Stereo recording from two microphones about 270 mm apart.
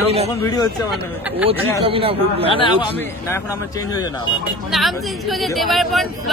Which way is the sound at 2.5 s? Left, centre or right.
Centre.